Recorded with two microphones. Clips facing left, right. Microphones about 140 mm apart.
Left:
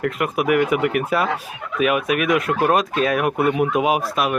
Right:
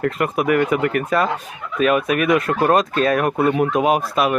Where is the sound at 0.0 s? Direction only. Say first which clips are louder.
Right 1 dB; 5° left (ahead or behind).